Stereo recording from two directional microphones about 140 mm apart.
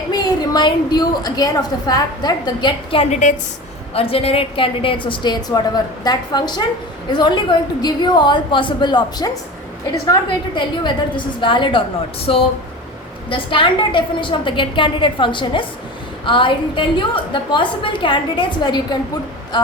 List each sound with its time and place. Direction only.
0.1 s a woman's voice: 30° left (ahead or behind)
3.1 s a woman's voice: 60° left (ahead or behind)
3.9 s a woman's voice: 45° left (ahead or behind)
13.3 s a woman's voice: 35° left (ahead or behind)